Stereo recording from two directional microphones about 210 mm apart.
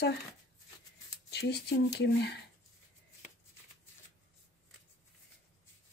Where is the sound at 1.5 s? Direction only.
50° left (ahead or behind).